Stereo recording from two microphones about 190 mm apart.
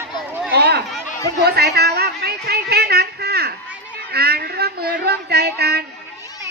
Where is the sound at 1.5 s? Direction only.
60° right (ahead or behind).